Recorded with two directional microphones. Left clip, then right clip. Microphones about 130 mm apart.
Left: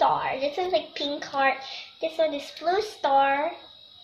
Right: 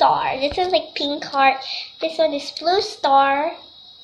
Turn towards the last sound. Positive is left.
turn(degrees=10)  # may be behind; listen again after turning